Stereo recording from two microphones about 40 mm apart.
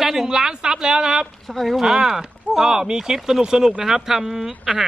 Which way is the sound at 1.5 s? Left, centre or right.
Centre.